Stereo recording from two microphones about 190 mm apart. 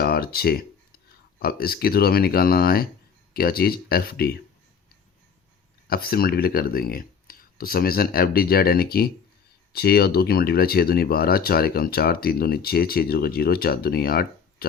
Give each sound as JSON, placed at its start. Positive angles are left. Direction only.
{"t": 0.0, "sound": "speech", "side_deg": 55}
{"t": 5.9, "sound": "speech", "side_deg": 50}